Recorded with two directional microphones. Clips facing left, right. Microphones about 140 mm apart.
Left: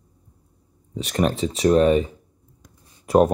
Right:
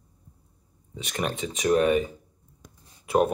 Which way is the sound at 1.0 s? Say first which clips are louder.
Left 8 dB; 40° left (ahead or behind).